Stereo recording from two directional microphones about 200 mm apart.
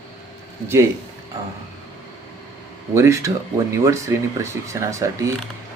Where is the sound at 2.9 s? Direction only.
15° right (ahead or behind).